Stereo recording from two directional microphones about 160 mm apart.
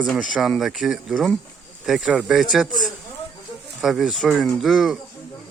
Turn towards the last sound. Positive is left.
turn(degrees=0)  # may be behind; listen again after turning